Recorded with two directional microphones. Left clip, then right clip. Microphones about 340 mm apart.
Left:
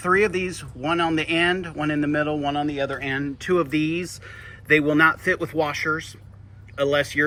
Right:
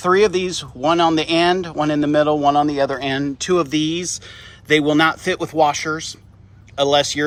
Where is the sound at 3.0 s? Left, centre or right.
Centre.